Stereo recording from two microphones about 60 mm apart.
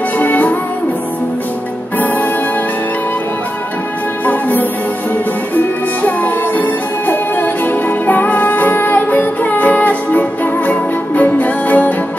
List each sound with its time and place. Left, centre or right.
0.2 s music: left
4.3 s music: left